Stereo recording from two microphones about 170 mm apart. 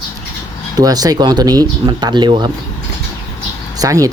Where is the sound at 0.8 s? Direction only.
20° right (ahead or behind).